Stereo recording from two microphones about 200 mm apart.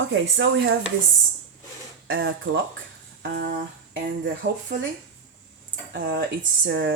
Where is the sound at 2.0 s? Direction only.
70° right (ahead or behind).